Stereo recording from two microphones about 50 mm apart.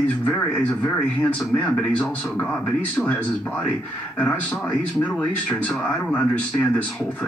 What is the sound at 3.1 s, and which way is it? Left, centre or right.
Speech, left.